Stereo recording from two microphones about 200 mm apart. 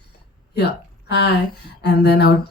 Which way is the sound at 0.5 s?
55° left (ahead or behind).